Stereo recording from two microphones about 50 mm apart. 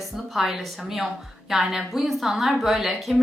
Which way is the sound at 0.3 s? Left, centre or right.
Centre.